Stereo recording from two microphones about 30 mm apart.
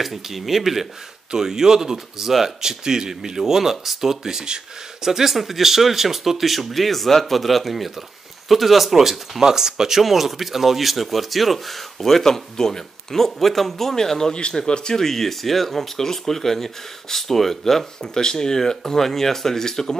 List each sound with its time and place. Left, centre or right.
0.0 s speech: centre
9.4 s speech: centre
10.0 s speech: centre
18.0 s speech: left